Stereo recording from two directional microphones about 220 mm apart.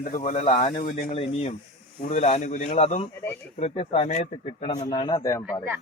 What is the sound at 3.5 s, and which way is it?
Speech, 30° left (ahead or behind).